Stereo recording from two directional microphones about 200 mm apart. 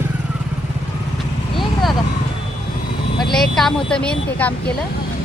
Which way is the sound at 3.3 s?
Centre (ahead or behind).